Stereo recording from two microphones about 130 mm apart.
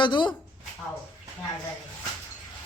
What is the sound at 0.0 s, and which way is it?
Speech, 35° left (ahead or behind).